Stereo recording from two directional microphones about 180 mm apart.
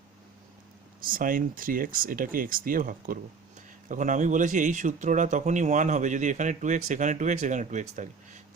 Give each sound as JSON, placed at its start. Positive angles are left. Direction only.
{"t": 1.0, "sound": "speech", "side_deg": -50}